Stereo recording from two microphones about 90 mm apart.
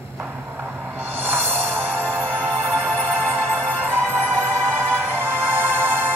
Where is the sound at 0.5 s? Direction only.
20° right (ahead or behind).